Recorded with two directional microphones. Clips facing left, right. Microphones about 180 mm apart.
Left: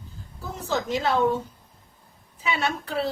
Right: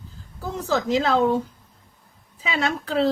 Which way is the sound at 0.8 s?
90° right.